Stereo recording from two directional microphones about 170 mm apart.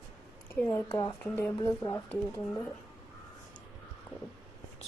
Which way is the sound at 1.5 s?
15° left (ahead or behind).